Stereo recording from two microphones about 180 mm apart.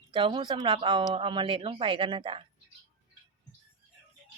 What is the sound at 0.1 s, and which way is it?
Speech, 25° right (ahead or behind).